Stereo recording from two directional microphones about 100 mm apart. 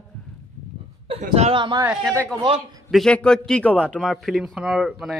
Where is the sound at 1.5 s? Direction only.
55° right (ahead or behind).